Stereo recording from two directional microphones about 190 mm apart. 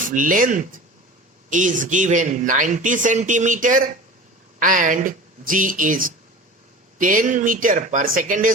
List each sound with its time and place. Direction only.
0.1 s speech: 45° right (ahead or behind)